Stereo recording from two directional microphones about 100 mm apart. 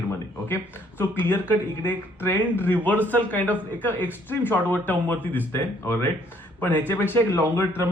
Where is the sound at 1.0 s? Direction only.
20° left (ahead or behind).